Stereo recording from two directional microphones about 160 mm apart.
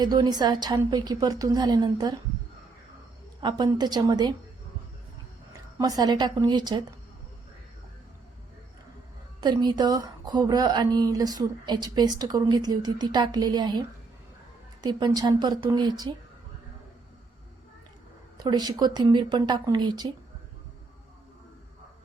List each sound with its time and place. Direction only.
0.0 s speech: 25° right (ahead or behind)
3.4 s speech: 25° right (ahead or behind)
5.5 s speech: 25° right (ahead or behind)
9.4 s speech: 25° right (ahead or behind)
18.3 s speech: 25° right (ahead or behind)